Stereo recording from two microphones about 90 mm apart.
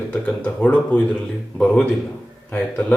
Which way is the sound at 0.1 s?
10° left (ahead or behind).